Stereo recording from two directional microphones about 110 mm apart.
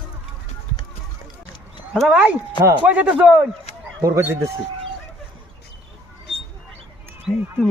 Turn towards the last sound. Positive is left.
turn(degrees=5)  # may be behind; listen again after turning